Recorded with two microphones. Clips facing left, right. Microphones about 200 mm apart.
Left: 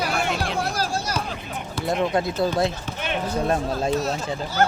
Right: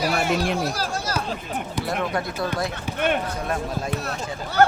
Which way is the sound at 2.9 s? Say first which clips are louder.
Right 5 dB; 55° right (ahead or behind).